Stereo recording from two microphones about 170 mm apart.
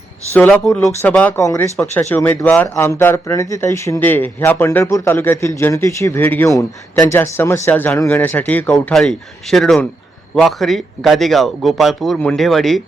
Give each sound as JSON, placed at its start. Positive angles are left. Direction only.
{"t": 0.3, "sound": "a man's voice", "side_deg": 5}